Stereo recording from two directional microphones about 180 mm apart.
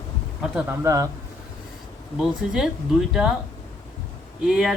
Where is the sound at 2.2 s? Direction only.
Centre (ahead or behind).